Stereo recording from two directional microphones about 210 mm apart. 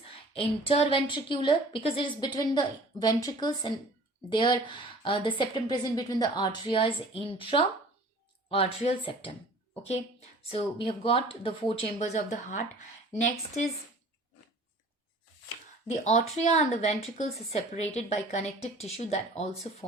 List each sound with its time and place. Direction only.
0.0 s a woman's voice: 25° left (ahead or behind)
15.9 s a woman's voice: 30° left (ahead or behind)